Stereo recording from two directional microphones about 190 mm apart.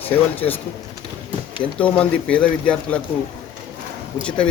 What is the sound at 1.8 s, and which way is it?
Speech, 5° left (ahead or behind).